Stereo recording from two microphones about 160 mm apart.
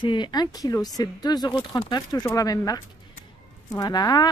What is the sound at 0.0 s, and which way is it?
Speech, 30° left (ahead or behind).